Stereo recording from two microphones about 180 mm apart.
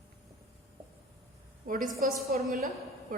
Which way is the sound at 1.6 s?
50° right (ahead or behind).